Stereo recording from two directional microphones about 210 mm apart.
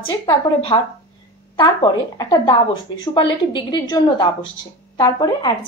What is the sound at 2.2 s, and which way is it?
A woman's voice, 20° left (ahead or behind).